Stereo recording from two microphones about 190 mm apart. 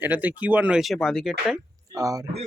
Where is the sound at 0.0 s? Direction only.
10° right (ahead or behind).